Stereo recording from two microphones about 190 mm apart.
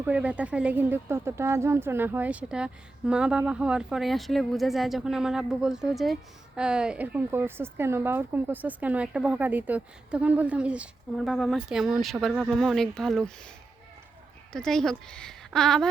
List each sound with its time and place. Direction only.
0.0 s speech: 5° right (ahead or behind)
14.5 s speech: 5° left (ahead or behind)